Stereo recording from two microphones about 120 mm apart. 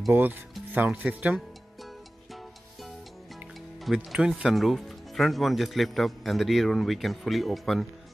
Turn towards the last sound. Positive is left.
turn(degrees=0)  # may be behind; listen again after turning